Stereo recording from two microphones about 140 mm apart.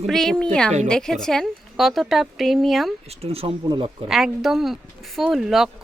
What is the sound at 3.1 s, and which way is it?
Speech, 45° right (ahead or behind).